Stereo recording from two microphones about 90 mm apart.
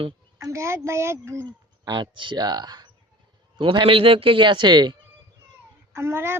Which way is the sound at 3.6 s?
70° right (ahead or behind).